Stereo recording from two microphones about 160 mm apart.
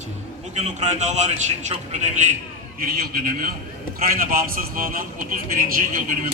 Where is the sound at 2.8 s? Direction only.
70° right (ahead or behind).